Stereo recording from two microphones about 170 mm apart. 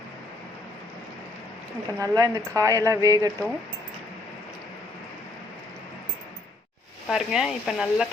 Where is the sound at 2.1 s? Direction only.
20° right (ahead or behind).